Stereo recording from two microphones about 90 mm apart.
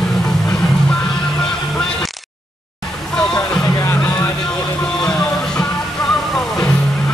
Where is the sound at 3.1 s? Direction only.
10° left (ahead or behind).